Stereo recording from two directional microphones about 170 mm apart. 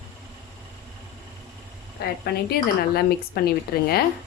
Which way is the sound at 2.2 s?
65° left (ahead or behind).